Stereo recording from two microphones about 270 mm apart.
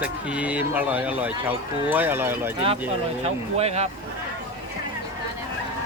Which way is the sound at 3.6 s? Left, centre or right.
Right.